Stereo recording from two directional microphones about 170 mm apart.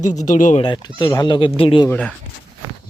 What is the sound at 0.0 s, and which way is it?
Speech, 45° left (ahead or behind).